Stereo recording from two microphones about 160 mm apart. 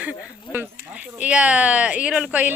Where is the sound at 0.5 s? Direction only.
10° right (ahead or behind).